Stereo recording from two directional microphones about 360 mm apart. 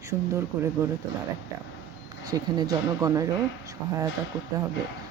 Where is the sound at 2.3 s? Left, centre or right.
Centre.